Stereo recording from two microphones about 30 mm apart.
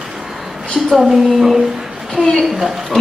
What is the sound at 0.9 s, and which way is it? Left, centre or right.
Speech, centre.